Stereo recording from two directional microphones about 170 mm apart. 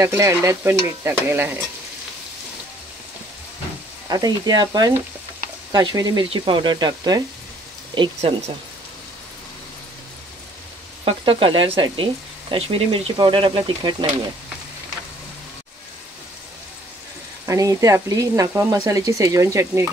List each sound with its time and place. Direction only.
0.0 s speech: 15° right (ahead or behind)
4.1 s speech: 25° right (ahead or behind)
11.1 s speech: 30° right (ahead or behind)
17.5 s speech: 20° right (ahead or behind)